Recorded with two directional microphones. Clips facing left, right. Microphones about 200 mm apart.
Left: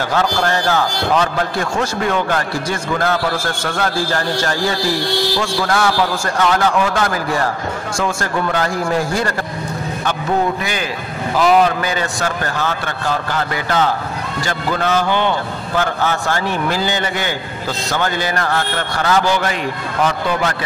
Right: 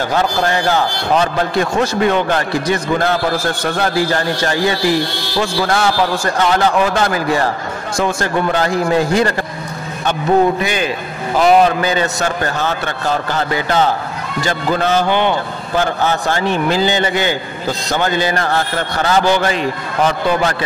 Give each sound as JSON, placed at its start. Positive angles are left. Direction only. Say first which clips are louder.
{"t": 0.1, "sound": "a man's voice", "louder": "even", "side_deg": -15}
{"t": 10.6, "sound": "a man's voice", "louder": "right 4 dB", "side_deg": -20}